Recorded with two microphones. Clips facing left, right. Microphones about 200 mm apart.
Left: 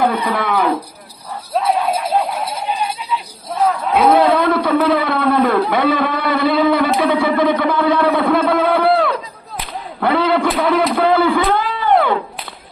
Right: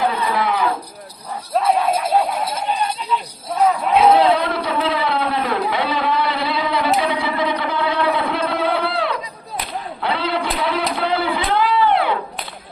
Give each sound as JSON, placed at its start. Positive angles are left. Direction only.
{"t": 0.3, "sound": "speech", "side_deg": 55}
{"t": 1.5, "sound": "speech", "side_deg": 0}
{"t": 4.1, "sound": "a man's voice", "side_deg": 55}
{"t": 10.0, "sound": "a sound", "side_deg": 50}